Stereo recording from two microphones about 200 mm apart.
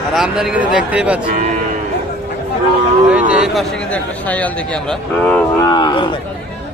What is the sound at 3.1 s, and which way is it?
Speech, 5° right (ahead or behind).